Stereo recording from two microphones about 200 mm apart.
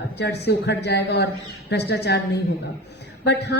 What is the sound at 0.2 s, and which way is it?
A woman's voice, 55° left (ahead or behind).